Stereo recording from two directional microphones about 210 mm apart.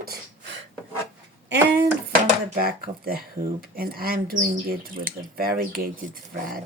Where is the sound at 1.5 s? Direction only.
50° right (ahead or behind).